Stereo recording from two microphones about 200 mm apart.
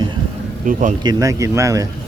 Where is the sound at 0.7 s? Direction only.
40° right (ahead or behind).